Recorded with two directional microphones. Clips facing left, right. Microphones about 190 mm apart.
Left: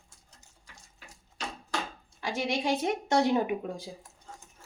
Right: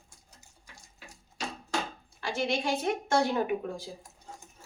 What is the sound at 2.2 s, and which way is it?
A woman's voice, 15° left (ahead or behind).